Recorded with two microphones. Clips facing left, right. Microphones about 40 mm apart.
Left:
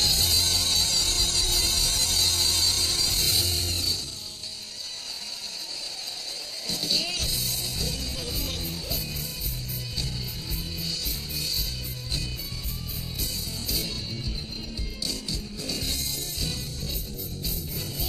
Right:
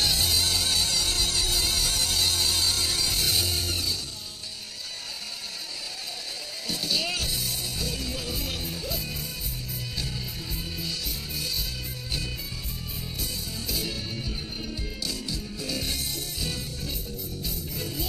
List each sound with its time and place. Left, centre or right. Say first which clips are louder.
0.0 s music: even; centre
6.7 s music: right 1 dB; centre
13.2 s music: even; centre